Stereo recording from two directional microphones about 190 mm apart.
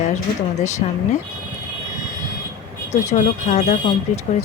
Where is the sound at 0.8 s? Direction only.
35° left (ahead or behind).